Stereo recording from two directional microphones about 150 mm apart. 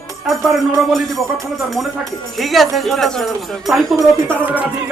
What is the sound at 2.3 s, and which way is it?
Speech, centre (ahead or behind).